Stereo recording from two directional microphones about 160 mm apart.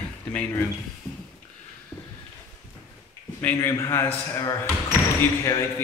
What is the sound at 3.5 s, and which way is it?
Speech, 15° left (ahead or behind).